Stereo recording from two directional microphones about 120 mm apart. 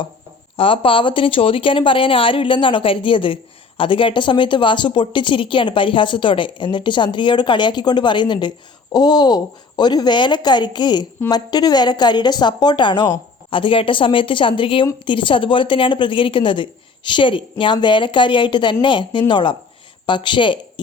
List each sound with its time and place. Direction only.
0.5 s a woman's voice: 50° left (ahead or behind)